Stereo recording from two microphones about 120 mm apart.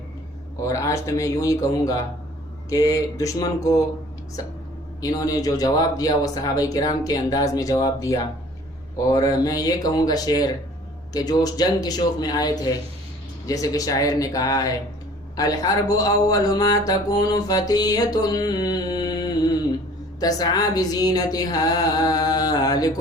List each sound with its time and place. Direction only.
0.6 s speech: 25° left (ahead or behind)
4.9 s speech: 30° left (ahead or behind)